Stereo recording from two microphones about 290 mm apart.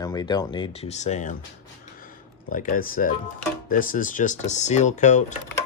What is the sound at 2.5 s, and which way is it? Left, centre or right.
Speech, left.